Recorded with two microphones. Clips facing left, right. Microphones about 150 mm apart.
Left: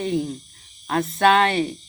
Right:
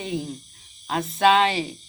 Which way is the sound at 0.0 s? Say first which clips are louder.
Left 5 dB; centre (ahead or behind).